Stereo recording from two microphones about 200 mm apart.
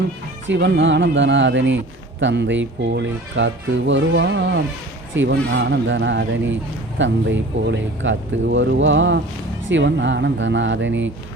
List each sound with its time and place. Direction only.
0.4 s speech: 60° right (ahead or behind)